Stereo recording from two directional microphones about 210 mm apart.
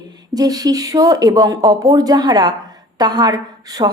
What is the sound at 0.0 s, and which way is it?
Speech, 20° right (ahead or behind).